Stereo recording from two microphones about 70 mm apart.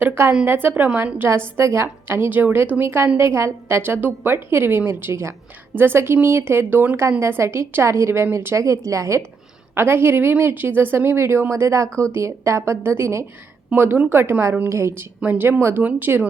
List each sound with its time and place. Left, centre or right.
0.0 s a sound: right
0.4 s a woman's voice: right
1.5 s a woman's voice: right
9.7 s a woman's voice: right
13.7 s a woman's voice: right
15.2 s speech: right